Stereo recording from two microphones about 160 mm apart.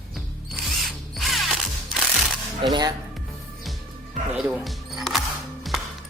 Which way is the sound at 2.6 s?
25° right (ahead or behind).